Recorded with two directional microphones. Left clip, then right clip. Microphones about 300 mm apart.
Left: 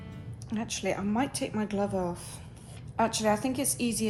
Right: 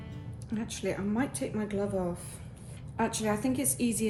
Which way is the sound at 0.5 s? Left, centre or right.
Left.